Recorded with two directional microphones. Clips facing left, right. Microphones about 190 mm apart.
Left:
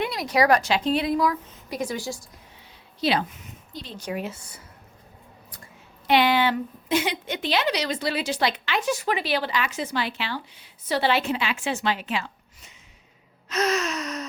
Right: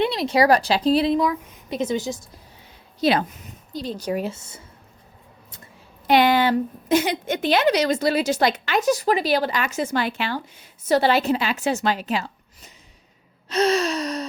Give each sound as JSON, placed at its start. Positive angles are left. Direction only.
{"t": 0.0, "sound": "a woman's voice", "side_deg": -25}
{"t": 3.0, "sound": "a woman's voice", "side_deg": -45}
{"t": 6.1, "sound": "a woman's voice", "side_deg": -45}